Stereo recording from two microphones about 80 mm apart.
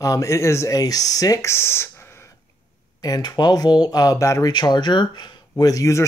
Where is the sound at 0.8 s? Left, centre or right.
Left.